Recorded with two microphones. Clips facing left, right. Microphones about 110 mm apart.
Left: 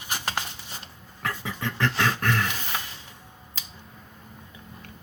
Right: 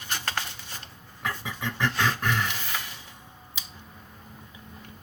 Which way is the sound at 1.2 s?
15° right (ahead or behind).